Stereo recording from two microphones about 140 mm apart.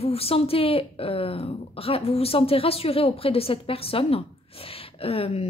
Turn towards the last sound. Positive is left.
turn(degrees=45)  # may be behind; listen again after turning